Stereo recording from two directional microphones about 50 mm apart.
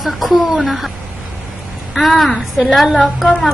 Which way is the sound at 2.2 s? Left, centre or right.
Centre.